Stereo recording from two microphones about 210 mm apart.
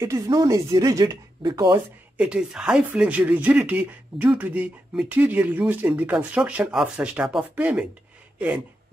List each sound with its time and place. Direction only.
0.0 s speech: 15° right (ahead or behind)
2.1 s speech: 5° right (ahead or behind)